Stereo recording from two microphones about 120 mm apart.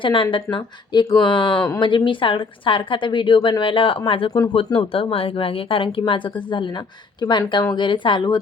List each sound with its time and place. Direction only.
0.0 s speech: 45° left (ahead or behind)